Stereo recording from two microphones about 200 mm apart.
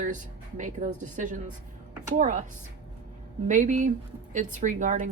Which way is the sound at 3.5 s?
40° right (ahead or behind).